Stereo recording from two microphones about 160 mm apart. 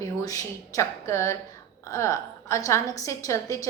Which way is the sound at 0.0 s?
20° left (ahead or behind).